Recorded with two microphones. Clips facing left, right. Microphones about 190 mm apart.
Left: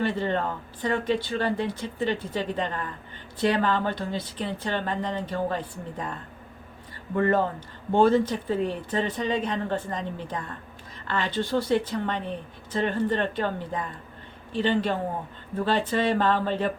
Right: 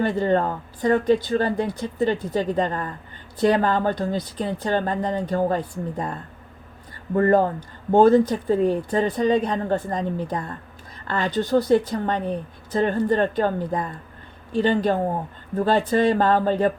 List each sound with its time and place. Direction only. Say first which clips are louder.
0.0 s speech: right 6 dB; 45° right (ahead or behind)
7.2 s speech: right 5 dB; 45° right (ahead or behind)